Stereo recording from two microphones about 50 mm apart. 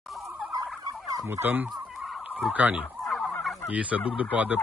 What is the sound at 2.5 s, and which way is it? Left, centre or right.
Speech, right.